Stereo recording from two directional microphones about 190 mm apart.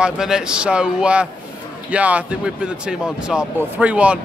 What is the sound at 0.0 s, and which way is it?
A man's voice, 5° right (ahead or behind).